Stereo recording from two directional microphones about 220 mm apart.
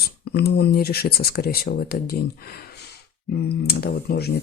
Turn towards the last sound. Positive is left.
turn(degrees=45)  # may be behind; listen again after turning